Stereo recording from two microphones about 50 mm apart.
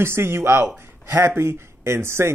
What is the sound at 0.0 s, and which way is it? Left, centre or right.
Speech, right.